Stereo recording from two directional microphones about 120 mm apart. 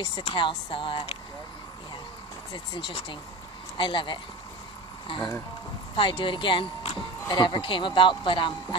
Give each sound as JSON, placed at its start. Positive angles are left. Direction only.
{"t": 0.0, "sound": "speech", "side_deg": 45}
{"t": 2.5, "sound": "speech", "side_deg": 40}
{"t": 5.9, "sound": "speech", "side_deg": 45}
{"t": 7.2, "sound": "speech", "side_deg": 40}